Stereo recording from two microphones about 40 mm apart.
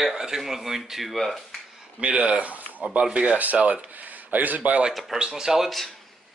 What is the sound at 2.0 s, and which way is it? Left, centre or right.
Speech, right.